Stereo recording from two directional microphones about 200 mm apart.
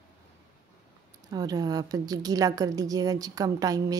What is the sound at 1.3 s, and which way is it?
A woman's voice, 20° right (ahead or behind).